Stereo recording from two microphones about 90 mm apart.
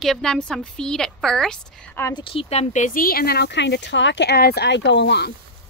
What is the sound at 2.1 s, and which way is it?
Speech, 70° left (ahead or behind).